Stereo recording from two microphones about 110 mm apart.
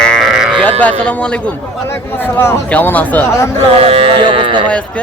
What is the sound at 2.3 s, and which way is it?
Speech, 20° left (ahead or behind).